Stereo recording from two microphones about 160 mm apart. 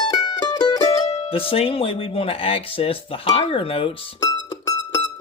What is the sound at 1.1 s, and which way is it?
Speech, 35° left (ahead or behind).